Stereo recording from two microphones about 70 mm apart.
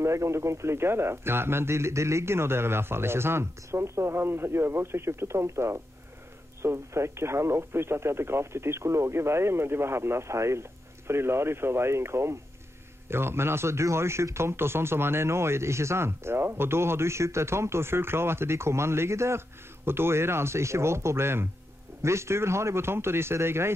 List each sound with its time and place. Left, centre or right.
0.0 s speech: right